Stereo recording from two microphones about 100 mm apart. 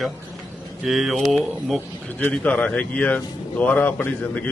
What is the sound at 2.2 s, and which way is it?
Speech, 15° left (ahead or behind).